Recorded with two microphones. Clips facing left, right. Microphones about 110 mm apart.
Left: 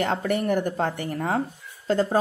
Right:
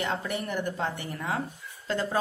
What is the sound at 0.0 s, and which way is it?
A woman's voice, 55° left (ahead or behind).